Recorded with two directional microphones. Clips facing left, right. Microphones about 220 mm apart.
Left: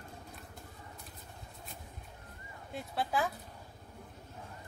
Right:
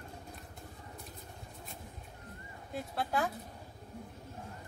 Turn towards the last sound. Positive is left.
turn(degrees=0)  # may be behind; listen again after turning